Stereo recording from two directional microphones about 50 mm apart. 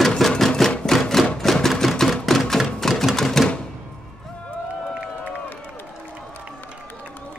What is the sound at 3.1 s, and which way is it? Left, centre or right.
Typewriter, centre.